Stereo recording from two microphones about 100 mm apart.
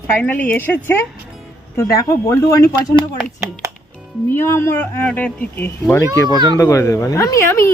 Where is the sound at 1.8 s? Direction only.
35° left (ahead or behind).